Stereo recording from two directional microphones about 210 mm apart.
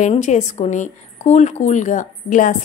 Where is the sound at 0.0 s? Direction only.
35° left (ahead or behind).